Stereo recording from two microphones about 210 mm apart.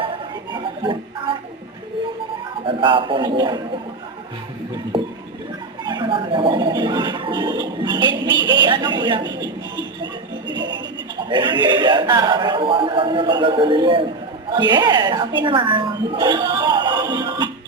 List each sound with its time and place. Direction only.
0.0 s music: 25° right (ahead or behind)
2.6 s speech: 25° right (ahead or behind)
5.8 s speech: 20° right (ahead or behind)
11.2 s a woman's voice: 20° right (ahead or behind)